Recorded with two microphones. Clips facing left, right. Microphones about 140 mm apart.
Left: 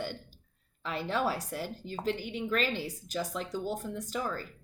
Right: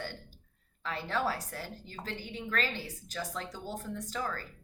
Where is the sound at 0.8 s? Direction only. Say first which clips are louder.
Left 2 dB; 20° left (ahead or behind).